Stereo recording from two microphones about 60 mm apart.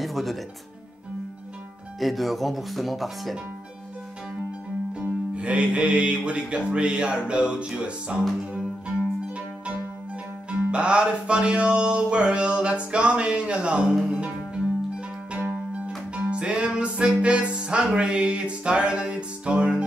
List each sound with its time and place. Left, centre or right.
0.0 s music: centre
2.0 s speech: centre
5.0 s music: right
8.5 s zither: centre
10.5 s music: centre